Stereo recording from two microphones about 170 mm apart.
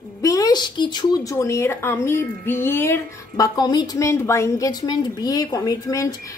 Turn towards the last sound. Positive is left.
turn(degrees=20)  # may be behind; listen again after turning